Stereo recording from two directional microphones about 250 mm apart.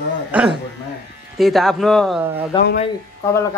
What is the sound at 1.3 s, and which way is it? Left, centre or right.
Speech, centre.